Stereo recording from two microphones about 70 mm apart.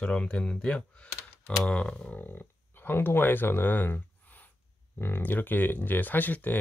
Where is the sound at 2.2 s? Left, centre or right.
Left.